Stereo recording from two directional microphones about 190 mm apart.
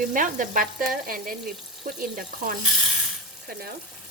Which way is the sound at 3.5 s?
55° right (ahead or behind).